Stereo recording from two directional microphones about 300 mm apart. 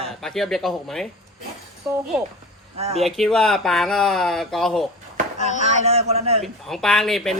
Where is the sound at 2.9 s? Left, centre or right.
Centre.